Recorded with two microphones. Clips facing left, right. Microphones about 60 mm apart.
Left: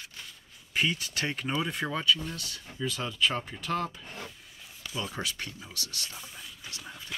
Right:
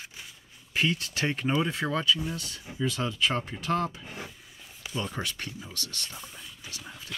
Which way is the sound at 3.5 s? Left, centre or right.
Centre.